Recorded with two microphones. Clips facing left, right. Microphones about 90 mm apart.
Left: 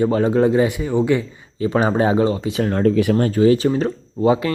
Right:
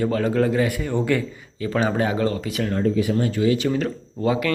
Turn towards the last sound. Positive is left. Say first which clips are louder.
# left 4 dB
turn(degrees=25)  # may be behind; listen again after turning